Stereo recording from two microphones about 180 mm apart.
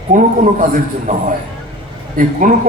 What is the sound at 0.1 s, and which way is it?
A man's voice, 45° right (ahead or behind).